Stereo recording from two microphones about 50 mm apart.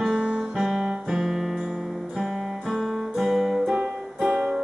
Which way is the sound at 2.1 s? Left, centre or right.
Centre.